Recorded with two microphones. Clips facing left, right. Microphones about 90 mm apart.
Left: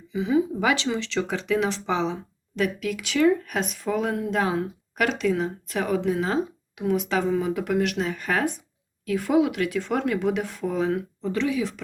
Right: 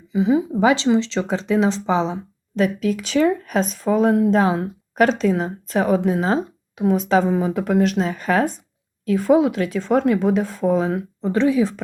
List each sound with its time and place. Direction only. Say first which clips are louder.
0.1 s speech: right 4 dB; 30° right (ahead or behind)